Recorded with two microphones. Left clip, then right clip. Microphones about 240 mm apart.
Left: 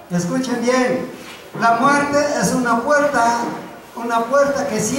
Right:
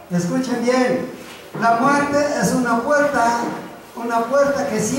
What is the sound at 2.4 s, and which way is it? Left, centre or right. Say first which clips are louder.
A woman's voice: left 1 dB; centre.